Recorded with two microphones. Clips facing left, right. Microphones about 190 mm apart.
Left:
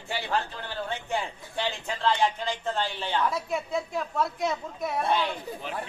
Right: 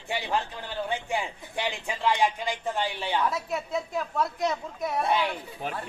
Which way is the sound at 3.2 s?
Centre (ahead or behind).